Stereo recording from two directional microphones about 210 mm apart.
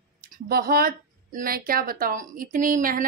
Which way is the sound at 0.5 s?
45° right (ahead or behind).